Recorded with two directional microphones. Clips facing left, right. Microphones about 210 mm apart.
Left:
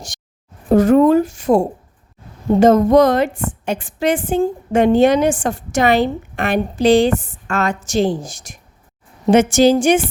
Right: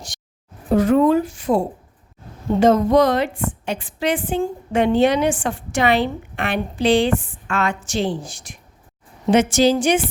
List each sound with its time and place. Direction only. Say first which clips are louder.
0.7 s a woman's voice: left 4 dB; 45° left (ahead or behind)